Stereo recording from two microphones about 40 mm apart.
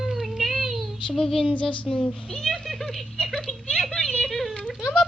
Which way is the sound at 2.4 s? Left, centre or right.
Centre.